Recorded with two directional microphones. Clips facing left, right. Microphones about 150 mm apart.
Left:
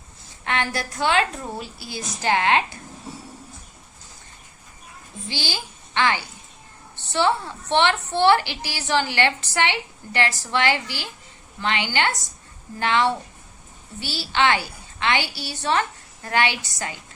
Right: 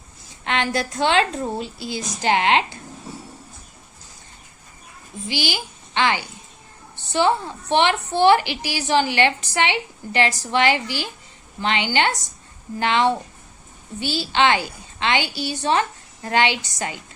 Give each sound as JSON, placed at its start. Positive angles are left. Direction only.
{"t": 0.4, "sound": "a woman's voice", "side_deg": -20}
{"t": 5.3, "sound": "a woman's voice", "side_deg": -15}